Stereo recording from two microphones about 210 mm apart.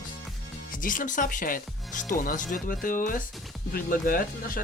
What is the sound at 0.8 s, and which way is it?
Speech, 40° left (ahead or behind).